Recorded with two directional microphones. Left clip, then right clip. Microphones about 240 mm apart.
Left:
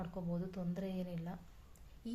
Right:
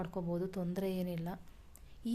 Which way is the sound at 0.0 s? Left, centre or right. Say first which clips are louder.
Right 6 dB; right.